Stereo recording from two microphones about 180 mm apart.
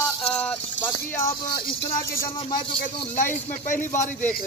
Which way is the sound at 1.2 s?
15° left (ahead or behind).